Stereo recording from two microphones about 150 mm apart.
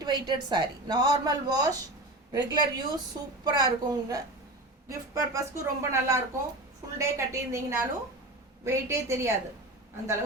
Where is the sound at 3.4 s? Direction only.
30° right (ahead or behind).